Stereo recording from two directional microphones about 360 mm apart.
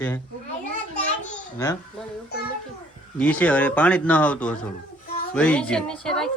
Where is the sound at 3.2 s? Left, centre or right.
Centre.